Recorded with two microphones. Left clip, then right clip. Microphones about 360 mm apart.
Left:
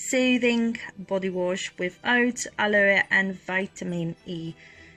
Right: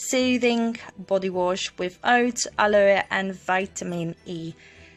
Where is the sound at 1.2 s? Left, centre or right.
Right.